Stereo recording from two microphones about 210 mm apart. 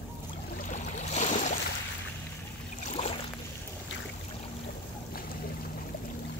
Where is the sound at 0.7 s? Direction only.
35° left (ahead or behind).